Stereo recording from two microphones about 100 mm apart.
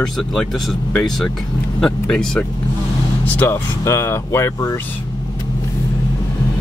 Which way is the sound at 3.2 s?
20° left (ahead or behind).